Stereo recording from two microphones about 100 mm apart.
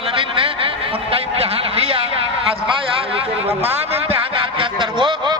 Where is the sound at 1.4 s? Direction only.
85° right.